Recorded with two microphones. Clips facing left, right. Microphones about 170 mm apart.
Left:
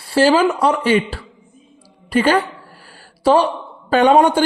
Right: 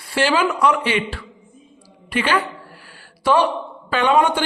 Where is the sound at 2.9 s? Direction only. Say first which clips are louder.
Left 4 dB; 30° left (ahead or behind).